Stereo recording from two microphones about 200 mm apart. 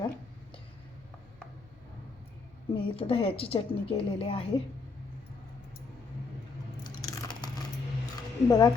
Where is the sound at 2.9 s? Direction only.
30° left (ahead or behind).